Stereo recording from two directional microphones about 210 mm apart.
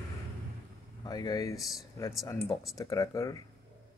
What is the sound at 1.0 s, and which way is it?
Speech, 20° left (ahead or behind).